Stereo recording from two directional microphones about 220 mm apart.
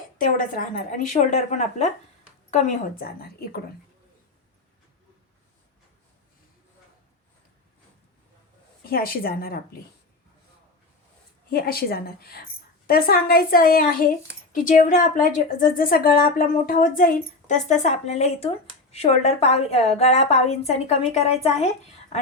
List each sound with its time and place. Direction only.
0.2 s a woman's voice: 40° left (ahead or behind)
8.9 s a woman's voice: 45° left (ahead or behind)
11.5 s a woman's voice: 45° left (ahead or behind)